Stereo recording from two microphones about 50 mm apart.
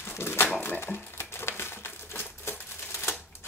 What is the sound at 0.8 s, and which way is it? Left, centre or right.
Crumpling, left.